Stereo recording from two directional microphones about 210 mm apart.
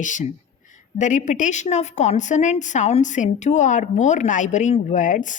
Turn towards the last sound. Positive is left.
turn(degrees=35)  # may be behind; listen again after turning